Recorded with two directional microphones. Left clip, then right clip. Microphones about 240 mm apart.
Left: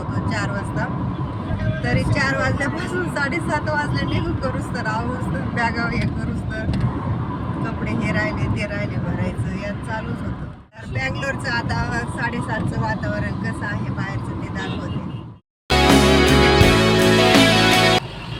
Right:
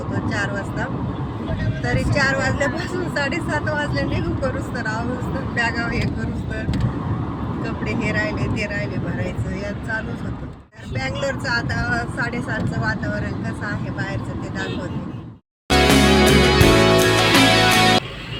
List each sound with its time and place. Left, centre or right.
2.0 s speech: centre
5.5 s speech: centre
11.0 s speech: centre
15.7 s music: centre